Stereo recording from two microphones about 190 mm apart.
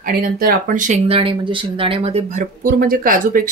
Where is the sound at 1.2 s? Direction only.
25° right (ahead or behind).